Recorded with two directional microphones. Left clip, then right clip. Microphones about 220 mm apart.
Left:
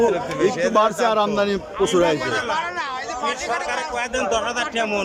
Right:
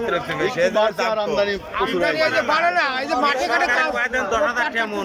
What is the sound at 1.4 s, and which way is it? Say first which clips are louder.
Speech: even; 15° left (ahead or behind).